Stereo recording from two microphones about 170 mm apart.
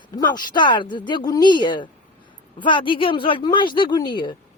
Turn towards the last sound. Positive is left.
turn(degrees=30)  # may be behind; listen again after turning